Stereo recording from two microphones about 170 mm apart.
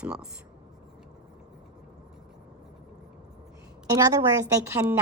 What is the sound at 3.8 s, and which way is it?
A woman's voice, 20° right (ahead or behind).